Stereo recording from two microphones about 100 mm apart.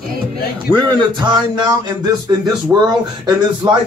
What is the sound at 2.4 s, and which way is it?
Speech, 45° right (ahead or behind).